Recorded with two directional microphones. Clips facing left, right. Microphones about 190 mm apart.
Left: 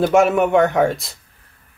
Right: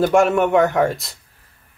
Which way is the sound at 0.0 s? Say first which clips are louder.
Left 1 dB; centre (ahead or behind).